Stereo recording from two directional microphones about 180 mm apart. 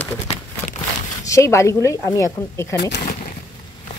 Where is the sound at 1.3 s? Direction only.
15° left (ahead or behind).